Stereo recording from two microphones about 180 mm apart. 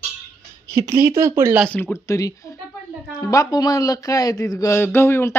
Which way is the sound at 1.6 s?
10° left (ahead or behind).